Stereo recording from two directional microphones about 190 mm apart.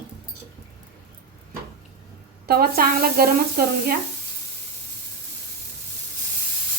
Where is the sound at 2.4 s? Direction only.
55° right (ahead or behind).